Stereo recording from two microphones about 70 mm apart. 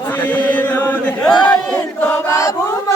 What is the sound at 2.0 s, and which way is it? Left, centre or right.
Chant, left.